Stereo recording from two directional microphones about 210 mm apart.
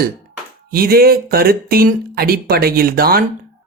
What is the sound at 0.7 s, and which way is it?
Speech, 45° right (ahead or behind).